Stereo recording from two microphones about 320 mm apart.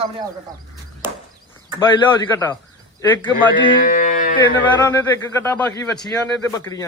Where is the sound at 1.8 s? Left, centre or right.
Centre.